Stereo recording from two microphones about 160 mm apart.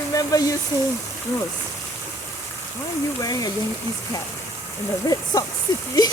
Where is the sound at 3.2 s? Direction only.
25° left (ahead or behind).